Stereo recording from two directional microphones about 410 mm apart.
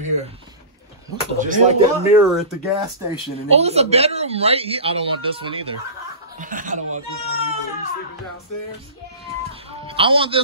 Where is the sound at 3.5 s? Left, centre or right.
Centre.